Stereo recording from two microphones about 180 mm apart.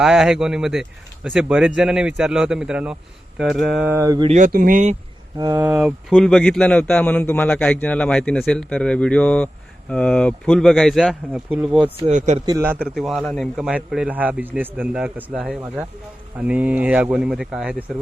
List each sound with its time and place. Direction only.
0.0 s speech: centre (ahead or behind); by 4.3 s 20° right (ahead or behind)
4.3 s speech: 45° right (ahead or behind)
5.4 s speech: 20° right (ahead or behind)
5.6 s speech: 5° right (ahead or behind)
11.9 s speech: 40° right (ahead or behind)
12.5 s speech: 15° right (ahead or behind)
12.9 s speech: centre (ahead or behind)